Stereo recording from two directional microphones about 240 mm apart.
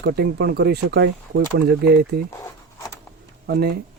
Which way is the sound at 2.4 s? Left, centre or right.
Centre.